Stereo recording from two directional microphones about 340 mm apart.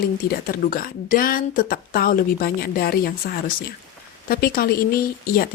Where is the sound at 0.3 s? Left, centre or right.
Left.